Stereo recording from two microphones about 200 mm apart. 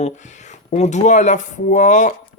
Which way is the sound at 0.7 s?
35° left (ahead or behind).